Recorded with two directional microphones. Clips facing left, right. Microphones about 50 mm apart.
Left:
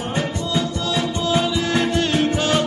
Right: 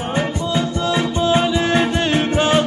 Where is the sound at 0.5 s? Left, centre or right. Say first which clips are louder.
Right 3 dB; right.